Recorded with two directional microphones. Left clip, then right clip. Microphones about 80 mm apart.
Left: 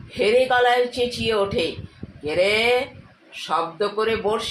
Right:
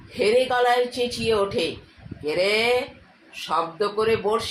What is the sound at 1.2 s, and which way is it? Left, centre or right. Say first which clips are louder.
Speech: even; centre.